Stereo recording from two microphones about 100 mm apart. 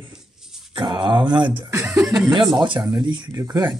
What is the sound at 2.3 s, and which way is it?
Speech, 55° right (ahead or behind).